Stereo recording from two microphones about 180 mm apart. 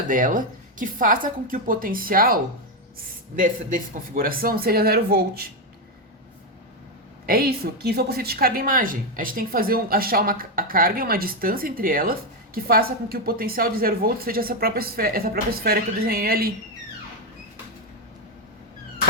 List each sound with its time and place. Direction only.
0.1 s a woman's voice: 50° right (ahead or behind)
7.3 s a woman's voice: 60° right (ahead or behind)